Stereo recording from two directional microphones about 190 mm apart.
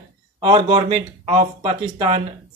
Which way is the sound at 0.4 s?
25° right (ahead or behind).